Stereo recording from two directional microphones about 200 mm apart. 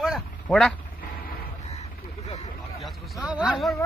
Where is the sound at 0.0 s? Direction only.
Centre (ahead or behind).